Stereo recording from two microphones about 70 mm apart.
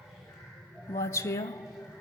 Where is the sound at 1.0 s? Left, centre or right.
Left.